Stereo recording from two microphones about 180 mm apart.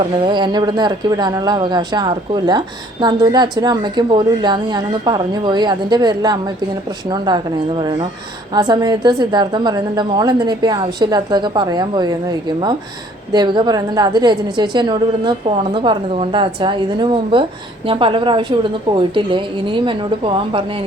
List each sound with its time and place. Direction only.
0.1 s speech: 25° right (ahead or behind)
13.3 s speech: 25° right (ahead or behind)